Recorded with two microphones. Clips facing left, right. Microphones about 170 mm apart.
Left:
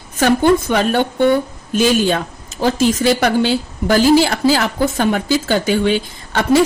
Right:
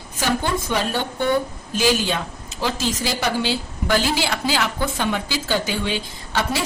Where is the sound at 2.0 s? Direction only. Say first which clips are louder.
Left 7 dB; 50° left (ahead or behind).